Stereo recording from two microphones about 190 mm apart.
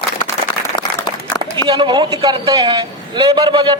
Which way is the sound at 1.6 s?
25° right (ahead or behind).